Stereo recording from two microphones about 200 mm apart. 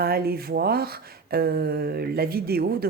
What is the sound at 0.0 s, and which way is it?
Speech, 50° right (ahead or behind).